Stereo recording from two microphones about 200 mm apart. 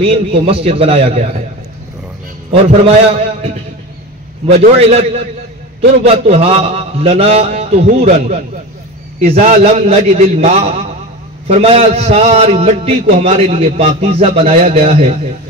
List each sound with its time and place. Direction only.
0.0 s a man's voice: 30° right (ahead or behind)
2.5 s a man's voice: 30° right (ahead or behind)
9.3 s a man's voice: 35° right (ahead or behind)